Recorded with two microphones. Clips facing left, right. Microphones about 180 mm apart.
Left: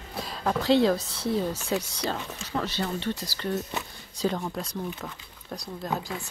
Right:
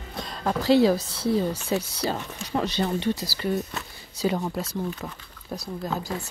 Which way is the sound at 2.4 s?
15° right (ahead or behind).